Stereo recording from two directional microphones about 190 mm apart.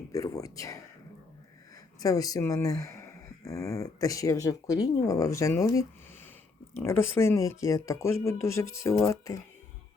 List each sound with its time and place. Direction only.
0.1 s speech: 15° left (ahead or behind)
2.0 s speech: 20° left (ahead or behind)